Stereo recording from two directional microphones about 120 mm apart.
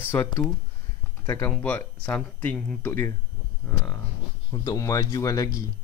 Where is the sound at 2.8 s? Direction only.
20° left (ahead or behind).